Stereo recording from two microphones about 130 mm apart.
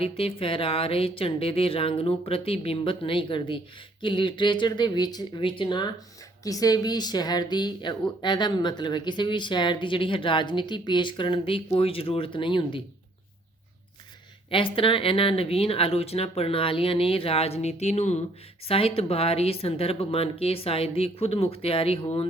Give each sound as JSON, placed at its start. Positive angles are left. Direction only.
{"t": 0.0, "sound": "a woman's voice", "side_deg": 45}
{"t": 14.5, "sound": "speech", "side_deg": 40}
{"t": 18.7, "sound": "speech", "side_deg": 50}